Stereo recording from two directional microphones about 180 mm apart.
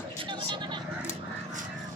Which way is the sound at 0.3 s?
25° right (ahead or behind).